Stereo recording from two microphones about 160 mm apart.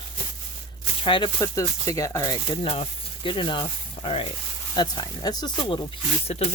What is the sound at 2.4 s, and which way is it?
Speech, 35° left (ahead or behind).